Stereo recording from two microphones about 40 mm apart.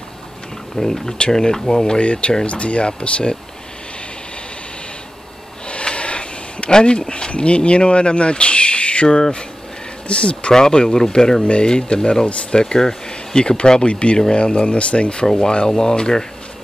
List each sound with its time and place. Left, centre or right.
0.7 s speech: centre
2.0 s speech: left
5.7 s speech: left